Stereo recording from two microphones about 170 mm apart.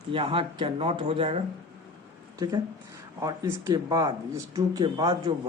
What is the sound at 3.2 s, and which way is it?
A man's voice, 20° right (ahead or behind).